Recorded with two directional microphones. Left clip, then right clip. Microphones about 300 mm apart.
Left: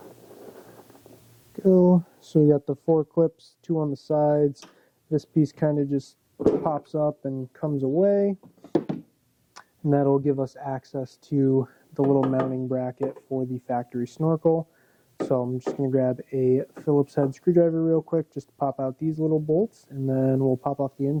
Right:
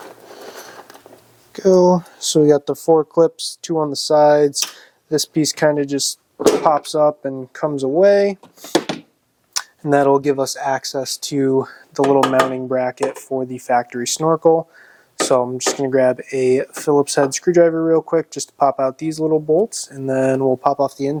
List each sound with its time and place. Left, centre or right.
0.0 s a sound: centre
1.5 s speech: centre
8.0 s speech: centre
15.2 s speech: centre
19.2 s speech: right
19.7 s speech: centre